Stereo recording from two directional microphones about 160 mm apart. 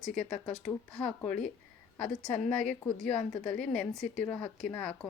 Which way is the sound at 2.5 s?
5° left (ahead or behind).